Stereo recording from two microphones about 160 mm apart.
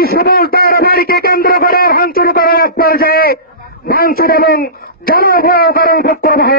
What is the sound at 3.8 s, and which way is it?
A man's voice, 70° left (ahead or behind).